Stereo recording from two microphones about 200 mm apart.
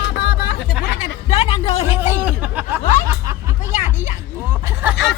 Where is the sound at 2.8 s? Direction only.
40° left (ahead or behind).